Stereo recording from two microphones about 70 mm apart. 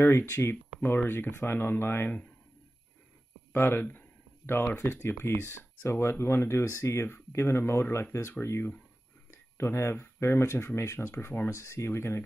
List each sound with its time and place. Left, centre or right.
0.0 s speech: left
3.5 s speech: left
9.3 s a sound: left
10.2 s speech: left